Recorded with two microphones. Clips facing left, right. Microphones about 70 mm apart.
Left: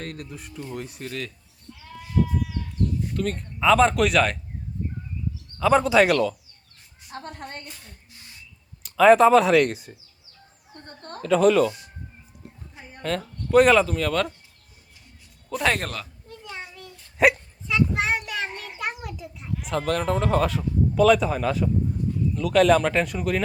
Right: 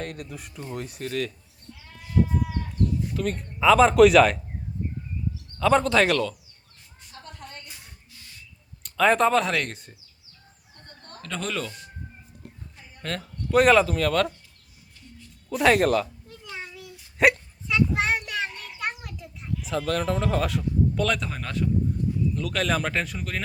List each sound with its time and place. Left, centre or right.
0.0 s speech: centre
2.2 s goat: right
3.1 s speech: centre
5.5 s speech: centre
7.1 s a sound: left
7.7 s music: centre
8.1 s a sound: left
8.8 s speech: centre
10.8 s a sound: left
11.2 s speech: centre
13.0 s speech: centre
15.4 s a sound: centre
19.6 s speech: centre